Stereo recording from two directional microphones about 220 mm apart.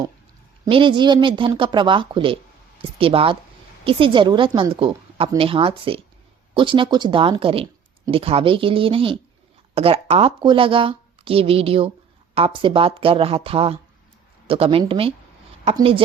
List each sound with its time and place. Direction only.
0.6 s speech: 20° right (ahead or behind)